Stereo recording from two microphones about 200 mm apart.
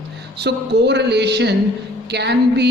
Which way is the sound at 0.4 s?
55° right (ahead or behind).